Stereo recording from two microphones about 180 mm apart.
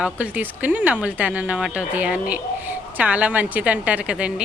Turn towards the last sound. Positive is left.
turn(degrees=-5)  # may be behind; listen again after turning